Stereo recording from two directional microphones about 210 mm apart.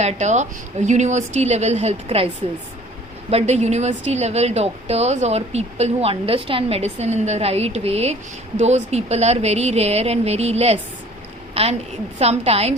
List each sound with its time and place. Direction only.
0.0 s a woman's voice: 35° right (ahead or behind)